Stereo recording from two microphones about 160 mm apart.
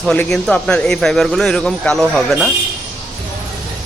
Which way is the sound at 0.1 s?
5° left (ahead or behind).